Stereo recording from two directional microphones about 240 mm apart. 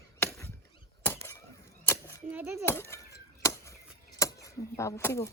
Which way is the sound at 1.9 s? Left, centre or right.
Centre.